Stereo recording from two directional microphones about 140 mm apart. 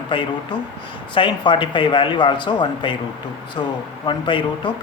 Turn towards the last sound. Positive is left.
turn(degrees=35)  # may be behind; listen again after turning